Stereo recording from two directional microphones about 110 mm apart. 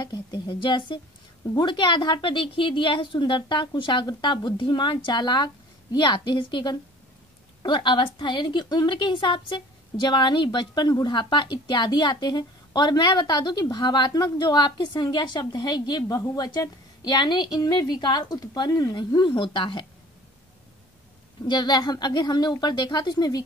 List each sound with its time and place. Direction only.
0.0 s a woman's voice: 40° left (ahead or behind)
18.9 s a woman's voice: 45° left (ahead or behind)
21.5 s a woman's voice: 40° left (ahead or behind)